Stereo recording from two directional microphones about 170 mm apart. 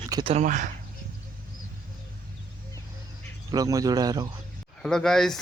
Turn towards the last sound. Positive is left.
turn(degrees=0)  # may be behind; listen again after turning